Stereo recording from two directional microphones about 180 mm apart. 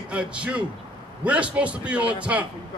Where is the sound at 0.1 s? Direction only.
5° right (ahead or behind).